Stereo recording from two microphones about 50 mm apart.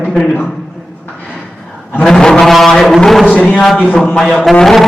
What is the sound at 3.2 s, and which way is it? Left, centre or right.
Speech, left.